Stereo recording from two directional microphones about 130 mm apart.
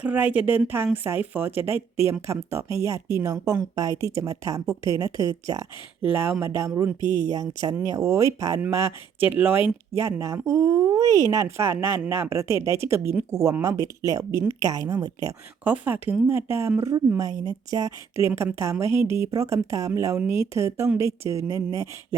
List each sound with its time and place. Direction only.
0.0 s speech: 10° right (ahead or behind); by 5.6 s 25° right (ahead or behind)
6.1 s speech: 15° right (ahead or behind)
15.6 s speech: 10° right (ahead or behind)